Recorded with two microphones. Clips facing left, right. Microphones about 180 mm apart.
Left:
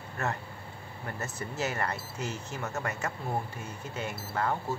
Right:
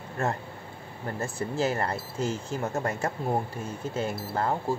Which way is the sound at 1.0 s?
30° right (ahead or behind).